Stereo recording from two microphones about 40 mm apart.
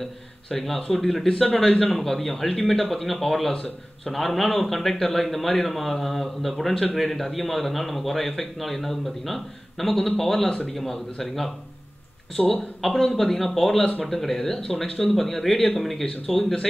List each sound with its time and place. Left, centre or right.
0.5 s a man's voice: centre
12.4 s a man's voice: centre
12.8 s a man's voice: centre